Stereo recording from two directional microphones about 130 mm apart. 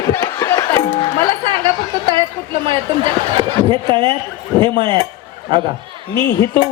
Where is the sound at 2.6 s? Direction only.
40° right (ahead or behind).